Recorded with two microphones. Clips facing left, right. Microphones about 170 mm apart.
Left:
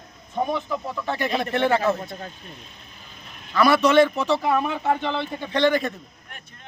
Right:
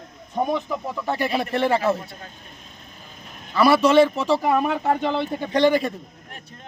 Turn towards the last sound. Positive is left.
turn(degrees=-10)  # may be behind; listen again after turning